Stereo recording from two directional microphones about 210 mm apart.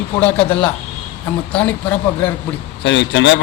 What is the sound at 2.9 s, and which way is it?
Speech, 55° left (ahead or behind).